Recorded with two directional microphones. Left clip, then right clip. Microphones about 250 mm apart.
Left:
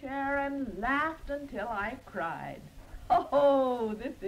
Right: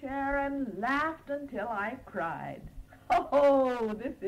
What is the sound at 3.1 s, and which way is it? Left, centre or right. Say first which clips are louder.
Speech: even; right.